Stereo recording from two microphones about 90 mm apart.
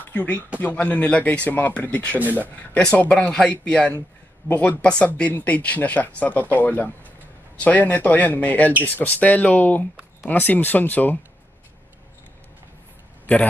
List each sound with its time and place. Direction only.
0.1 s speech: 20° left (ahead or behind)
2.1 s speech: 20° right (ahead or behind)
2.7 s speech: 15° left (ahead or behind)